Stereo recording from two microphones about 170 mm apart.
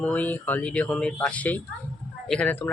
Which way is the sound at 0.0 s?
10° left (ahead or behind).